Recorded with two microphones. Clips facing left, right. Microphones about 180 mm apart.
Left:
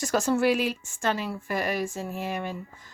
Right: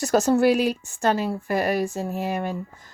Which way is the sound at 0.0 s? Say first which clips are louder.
Right 5 dB; 40° right (ahead or behind).